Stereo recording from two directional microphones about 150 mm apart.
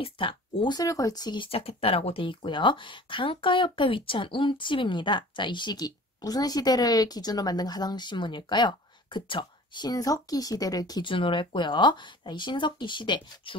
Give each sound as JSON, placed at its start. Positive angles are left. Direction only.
{"t": 0.0, "sound": "speech", "side_deg": 35}